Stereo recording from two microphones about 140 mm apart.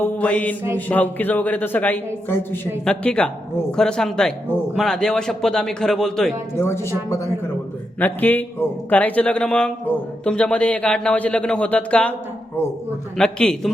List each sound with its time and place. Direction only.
0.0 s a man's voice: 10° left (ahead or behind)
6.6 s speech: 20° left (ahead or behind)
7.9 s a man's voice: 10° left (ahead or behind)
13.1 s a man's voice: 5° left (ahead or behind)